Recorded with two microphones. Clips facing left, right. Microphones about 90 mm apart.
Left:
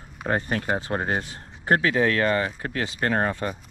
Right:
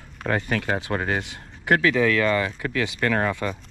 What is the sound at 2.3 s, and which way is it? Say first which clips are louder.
Speech: right 1 dB; 35° left (ahead or behind).